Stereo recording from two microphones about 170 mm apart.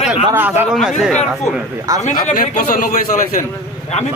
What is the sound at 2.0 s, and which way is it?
Speech, 50° left (ahead or behind).